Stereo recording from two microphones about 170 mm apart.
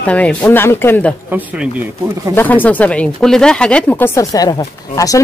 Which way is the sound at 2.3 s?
10° left (ahead or behind).